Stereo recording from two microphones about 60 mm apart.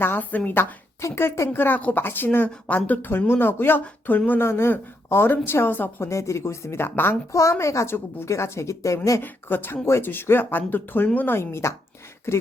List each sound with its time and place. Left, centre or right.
0.0 s speech: left
1.0 s speech: left
4.4 s speech: left
6.1 s speech: left
7.5 s a woman's voice: left
7.9 s a woman's voice: left
9.2 s speech: left
11.3 s speech: left